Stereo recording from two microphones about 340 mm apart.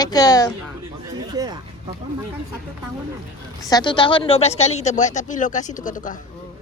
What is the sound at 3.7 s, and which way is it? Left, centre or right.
Speech, centre.